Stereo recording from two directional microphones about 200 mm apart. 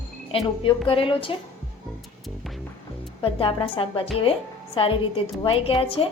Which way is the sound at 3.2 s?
25° left (ahead or behind).